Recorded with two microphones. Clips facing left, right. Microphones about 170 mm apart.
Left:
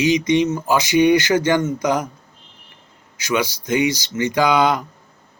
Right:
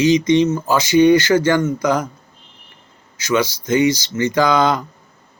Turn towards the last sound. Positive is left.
turn(degrees=15)  # may be behind; listen again after turning